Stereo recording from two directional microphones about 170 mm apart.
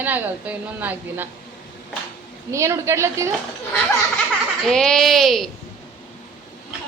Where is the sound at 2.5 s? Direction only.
15° right (ahead or behind).